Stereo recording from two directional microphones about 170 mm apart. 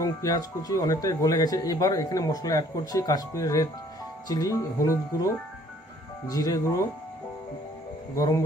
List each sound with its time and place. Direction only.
0.0 s speech: 20° left (ahead or behind)